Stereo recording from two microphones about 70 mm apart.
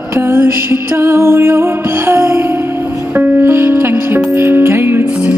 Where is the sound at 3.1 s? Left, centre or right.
Right.